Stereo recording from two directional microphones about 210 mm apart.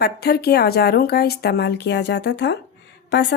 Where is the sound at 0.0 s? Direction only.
50° left (ahead or behind).